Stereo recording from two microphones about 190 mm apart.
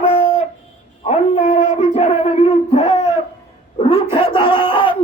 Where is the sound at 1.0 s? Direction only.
35° left (ahead or behind).